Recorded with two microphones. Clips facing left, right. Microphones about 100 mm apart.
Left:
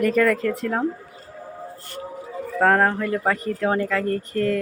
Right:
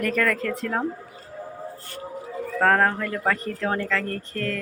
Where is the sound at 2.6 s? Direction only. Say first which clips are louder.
Left 2 dB; 5° left (ahead or behind).